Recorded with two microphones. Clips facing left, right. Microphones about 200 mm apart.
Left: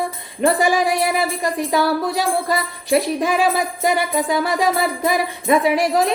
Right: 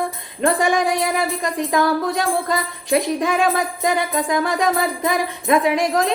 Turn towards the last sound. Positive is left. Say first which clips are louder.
# left 1 dB
turn(degrees=5)  # may be behind; listen again after turning